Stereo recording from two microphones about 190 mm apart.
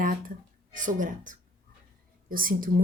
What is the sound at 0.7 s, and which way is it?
Speech, 45° right (ahead or behind).